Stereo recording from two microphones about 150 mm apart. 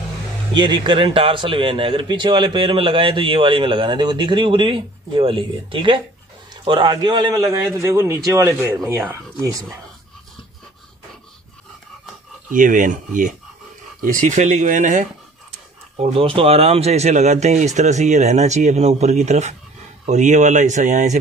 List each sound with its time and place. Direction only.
0.6 s a man's voice: 30° right (ahead or behind)
12.5 s speech: 60° right (ahead or behind)
16.0 s speech: 40° right (ahead or behind)